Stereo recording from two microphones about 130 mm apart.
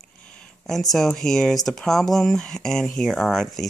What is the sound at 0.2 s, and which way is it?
Speech, 10° left (ahead or behind).